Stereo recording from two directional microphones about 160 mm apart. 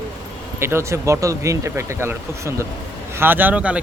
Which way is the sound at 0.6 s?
15° right (ahead or behind).